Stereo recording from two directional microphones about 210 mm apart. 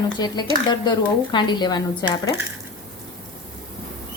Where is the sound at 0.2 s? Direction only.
20° left (ahead or behind).